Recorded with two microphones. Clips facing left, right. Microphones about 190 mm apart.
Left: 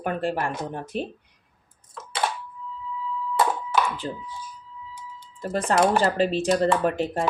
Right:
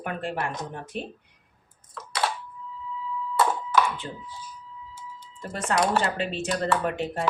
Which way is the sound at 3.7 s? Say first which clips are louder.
Even; 35° left (ahead or behind).